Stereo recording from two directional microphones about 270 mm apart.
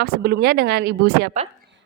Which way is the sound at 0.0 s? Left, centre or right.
Right.